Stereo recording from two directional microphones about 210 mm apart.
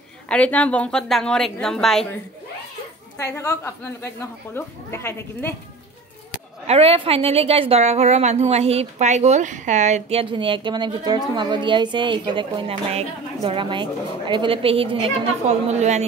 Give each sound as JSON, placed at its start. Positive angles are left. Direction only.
{"t": 0.3, "sound": "a woman's voice", "side_deg": 5}
{"t": 3.2, "sound": "speech", "side_deg": 15}
{"t": 6.7, "sound": "a woman's voice", "side_deg": -30}